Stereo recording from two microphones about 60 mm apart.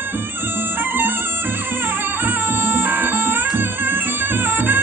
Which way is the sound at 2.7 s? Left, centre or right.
Right.